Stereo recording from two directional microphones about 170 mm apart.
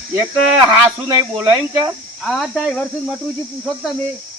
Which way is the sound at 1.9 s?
Centre (ahead or behind).